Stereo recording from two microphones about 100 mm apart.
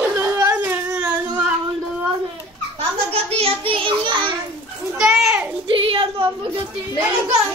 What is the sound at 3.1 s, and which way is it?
Child singing, 85° right.